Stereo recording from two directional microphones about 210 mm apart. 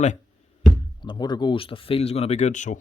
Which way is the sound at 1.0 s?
20° left (ahead or behind).